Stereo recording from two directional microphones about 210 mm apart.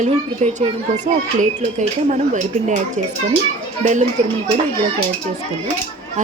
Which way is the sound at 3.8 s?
35° right (ahead or behind).